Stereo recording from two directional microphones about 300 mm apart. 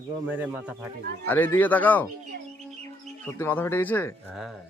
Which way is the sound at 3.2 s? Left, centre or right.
Centre.